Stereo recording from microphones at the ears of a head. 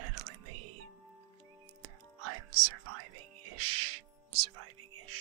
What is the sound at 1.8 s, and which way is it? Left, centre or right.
Music, right.